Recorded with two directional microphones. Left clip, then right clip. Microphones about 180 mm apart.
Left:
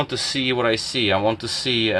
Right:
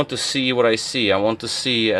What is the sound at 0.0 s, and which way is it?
Speech, 40° right (ahead or behind).